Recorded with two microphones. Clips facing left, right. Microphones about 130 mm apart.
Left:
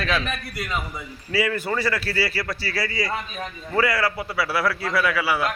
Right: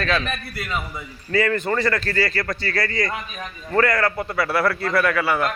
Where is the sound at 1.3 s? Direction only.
10° left (ahead or behind).